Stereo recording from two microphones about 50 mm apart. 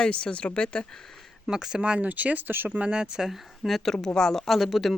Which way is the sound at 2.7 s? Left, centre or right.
Right.